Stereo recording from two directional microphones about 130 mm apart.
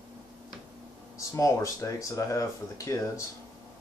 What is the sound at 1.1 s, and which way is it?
Speech, 25° left (ahead or behind).